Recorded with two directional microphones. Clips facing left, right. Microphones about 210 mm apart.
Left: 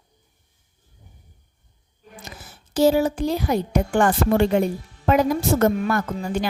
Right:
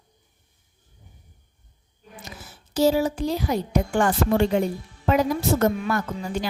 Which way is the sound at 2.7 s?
55° left (ahead or behind).